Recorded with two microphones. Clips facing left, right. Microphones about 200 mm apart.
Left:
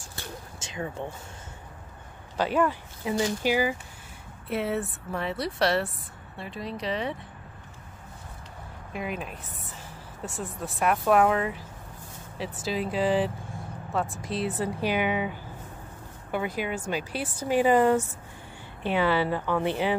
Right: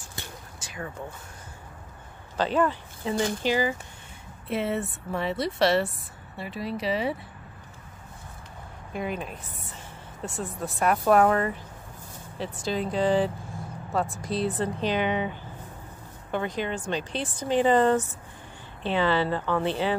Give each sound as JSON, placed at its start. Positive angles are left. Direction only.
{"t": 0.6, "sound": "speech", "side_deg": 20}
{"t": 2.3, "sound": "a woman's voice", "side_deg": 10}
{"t": 8.9, "sound": "a woman's voice", "side_deg": 0}